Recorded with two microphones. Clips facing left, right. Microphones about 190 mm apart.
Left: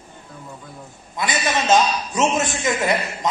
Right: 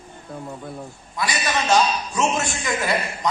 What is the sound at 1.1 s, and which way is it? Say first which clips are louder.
A man's voice: left 2 dB; 20° left (ahead or behind).